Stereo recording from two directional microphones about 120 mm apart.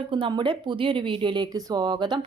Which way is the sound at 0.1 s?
45° right (ahead or behind).